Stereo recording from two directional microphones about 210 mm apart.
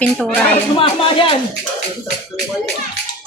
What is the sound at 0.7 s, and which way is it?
Speech, 25° left (ahead or behind).